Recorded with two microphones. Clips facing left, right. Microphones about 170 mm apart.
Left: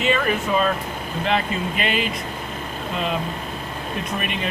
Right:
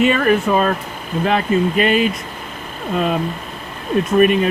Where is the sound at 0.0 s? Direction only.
50° right (ahead or behind).